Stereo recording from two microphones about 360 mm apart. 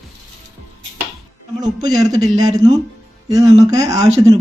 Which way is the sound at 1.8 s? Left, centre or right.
Centre.